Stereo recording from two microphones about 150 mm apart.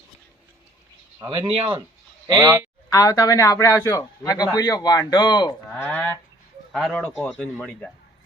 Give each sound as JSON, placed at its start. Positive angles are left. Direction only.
{"t": 1.5, "sound": "speech", "side_deg": -35}
{"t": 2.2, "sound": "speech", "side_deg": -20}
{"t": 2.9, "sound": "a man's voice", "side_deg": 20}
{"t": 5.7, "sound": "a sound", "side_deg": 10}
{"t": 6.7, "sound": "speech", "side_deg": 5}